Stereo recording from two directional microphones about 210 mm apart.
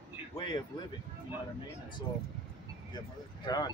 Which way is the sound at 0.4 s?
20° left (ahead or behind).